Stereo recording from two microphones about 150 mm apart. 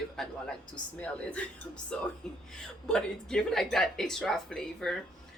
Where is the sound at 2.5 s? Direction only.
5° left (ahead or behind).